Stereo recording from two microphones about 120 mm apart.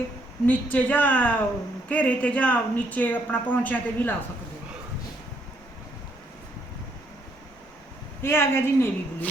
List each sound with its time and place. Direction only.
0.4 s speech: 10° left (ahead or behind)
8.2 s a woman's voice: 20° left (ahead or behind)